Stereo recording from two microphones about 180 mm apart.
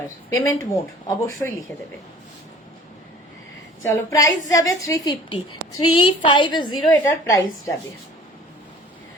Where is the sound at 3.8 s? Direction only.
15° left (ahead or behind).